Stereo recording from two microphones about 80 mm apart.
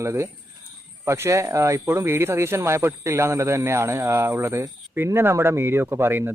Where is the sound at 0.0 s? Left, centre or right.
Right.